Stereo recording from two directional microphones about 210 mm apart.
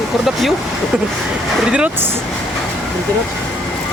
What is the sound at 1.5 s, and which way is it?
Speech, 5° right (ahead or behind).